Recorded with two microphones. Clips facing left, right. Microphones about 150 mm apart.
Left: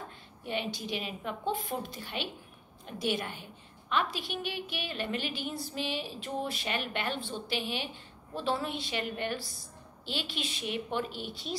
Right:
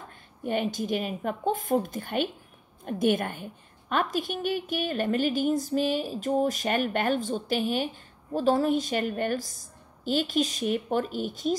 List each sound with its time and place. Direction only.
0.5 s a woman's voice: 45° right (ahead or behind)